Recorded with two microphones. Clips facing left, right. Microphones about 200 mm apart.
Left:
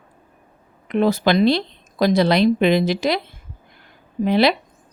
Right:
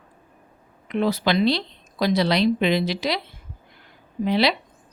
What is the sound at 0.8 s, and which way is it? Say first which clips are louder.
Speech: left 4 dB; 50° left (ahead or behind).